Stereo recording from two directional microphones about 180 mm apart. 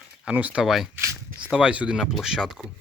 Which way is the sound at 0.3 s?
5° right (ahead or behind).